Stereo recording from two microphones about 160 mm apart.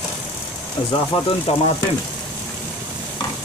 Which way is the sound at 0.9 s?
35° left (ahead or behind).